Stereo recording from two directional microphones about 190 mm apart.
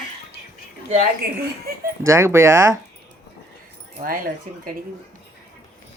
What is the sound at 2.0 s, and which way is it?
Speech, 15° right (ahead or behind).